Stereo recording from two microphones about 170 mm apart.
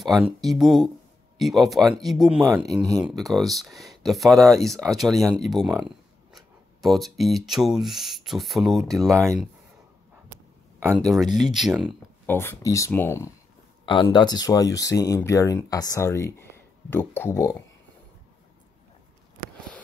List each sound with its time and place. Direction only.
0.4 s speech: centre (ahead or behind)
2.7 s speech: 20° right (ahead or behind)
3.0 s speech: centre (ahead or behind)
9.1 s speech: 15° right (ahead or behind)
10.8 s speech: 20° right (ahead or behind)
11.5 s speech: centre (ahead or behind)
12.3 s speech: 15° left (ahead or behind)
13.8 s speech: 25° left (ahead or behind)